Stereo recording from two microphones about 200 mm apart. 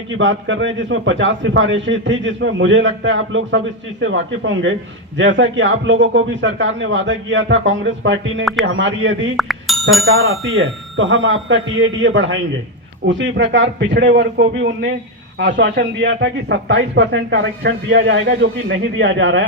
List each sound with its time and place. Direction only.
0.1 s a man's voice: 70° right (ahead or behind)
9.4 s bicycle bell: centre (ahead or behind)
10.2 s a man's voice: 80° right; by 19.5 s 65° right (ahead or behind)